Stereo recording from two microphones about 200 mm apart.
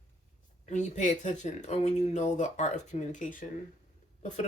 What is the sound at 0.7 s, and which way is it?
Speech, 35° left (ahead or behind).